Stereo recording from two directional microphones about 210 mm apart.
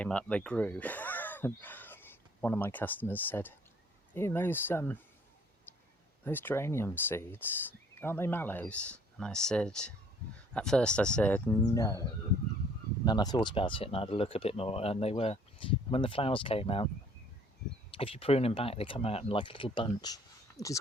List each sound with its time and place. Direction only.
0.0 s speech: 5° left (ahead or behind)
6.2 s speech: 10° left (ahead or behind)
13.1 s speech: 20° left (ahead or behind)
17.9 s speech: 25° left (ahead or behind)